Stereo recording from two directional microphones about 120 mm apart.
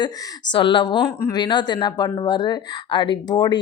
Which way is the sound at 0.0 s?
40° left (ahead or behind).